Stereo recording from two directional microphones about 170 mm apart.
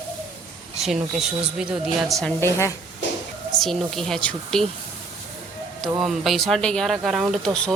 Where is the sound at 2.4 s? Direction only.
15° left (ahead or behind).